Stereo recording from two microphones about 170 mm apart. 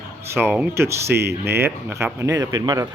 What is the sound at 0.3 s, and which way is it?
Speech, 15° right (ahead or behind).